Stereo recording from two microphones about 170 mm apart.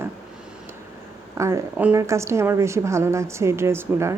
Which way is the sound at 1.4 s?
20° right (ahead or behind).